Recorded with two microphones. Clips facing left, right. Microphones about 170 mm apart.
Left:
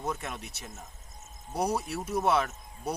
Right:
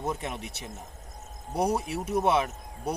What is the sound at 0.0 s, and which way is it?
Speech, 25° right (ahead or behind).